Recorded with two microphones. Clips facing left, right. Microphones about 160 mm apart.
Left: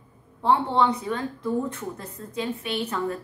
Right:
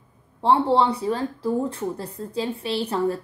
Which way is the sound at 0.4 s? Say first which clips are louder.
Right 3 dB; 30° right (ahead or behind).